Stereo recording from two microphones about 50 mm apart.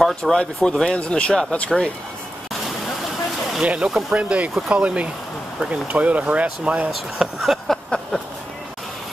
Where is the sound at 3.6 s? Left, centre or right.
Centre.